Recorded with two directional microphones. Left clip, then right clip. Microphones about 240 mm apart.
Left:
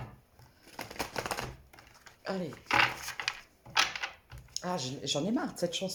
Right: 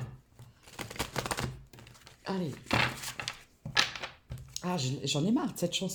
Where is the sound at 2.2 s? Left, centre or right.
Right.